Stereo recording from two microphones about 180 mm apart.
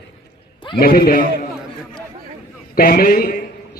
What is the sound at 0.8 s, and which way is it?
Speech, 55° left (ahead or behind).